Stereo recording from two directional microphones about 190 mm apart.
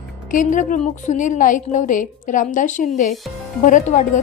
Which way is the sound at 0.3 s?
45° left (ahead or behind).